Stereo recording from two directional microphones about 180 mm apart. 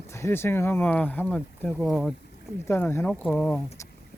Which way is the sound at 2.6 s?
15° left (ahead or behind).